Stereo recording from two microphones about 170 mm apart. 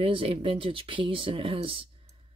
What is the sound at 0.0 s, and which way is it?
Speech, 30° right (ahead or behind).